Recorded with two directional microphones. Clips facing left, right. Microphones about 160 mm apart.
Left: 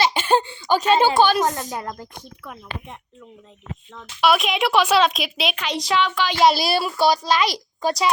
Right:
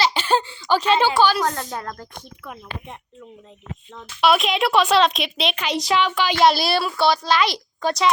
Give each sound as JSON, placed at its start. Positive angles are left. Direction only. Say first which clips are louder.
{"t": 0.0, "sound": "a sound", "louder": "left 1 dB", "side_deg": 20}
{"t": 0.8, "sound": "speech", "louder": "left 2 dB", "side_deg": 45}
{"t": 1.3, "sound": "a woman's voice", "louder": "left 2 dB", "side_deg": 20}
{"t": 3.9, "sound": "a woman's voice", "louder": "right 1 dB", "side_deg": 0}
{"t": 6.4, "sound": "a woman's voice", "louder": "even", "side_deg": 5}
{"t": 7.3, "sound": "a child's voice", "louder": "even", "side_deg": 40}